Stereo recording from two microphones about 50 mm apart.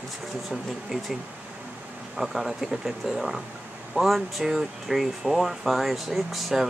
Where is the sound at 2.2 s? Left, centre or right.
Centre.